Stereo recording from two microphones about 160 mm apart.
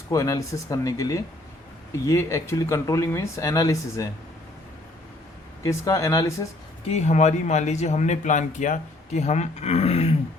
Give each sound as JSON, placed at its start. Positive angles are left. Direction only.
{"t": 0.1, "sound": "speech", "side_deg": 20}
{"t": 5.6, "sound": "speech", "side_deg": 20}
{"t": 6.8, "sound": "speech", "side_deg": 45}